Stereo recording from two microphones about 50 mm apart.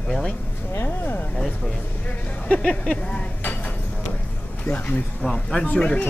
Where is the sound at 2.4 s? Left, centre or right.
Left.